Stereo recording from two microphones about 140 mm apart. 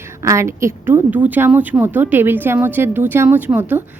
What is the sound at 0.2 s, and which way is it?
Speech, 20° right (ahead or behind).